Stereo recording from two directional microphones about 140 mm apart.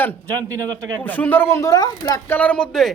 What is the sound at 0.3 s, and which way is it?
Speech, 25° right (ahead or behind).